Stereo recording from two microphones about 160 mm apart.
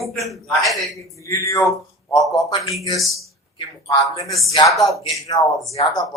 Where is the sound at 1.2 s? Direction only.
20° left (ahead or behind).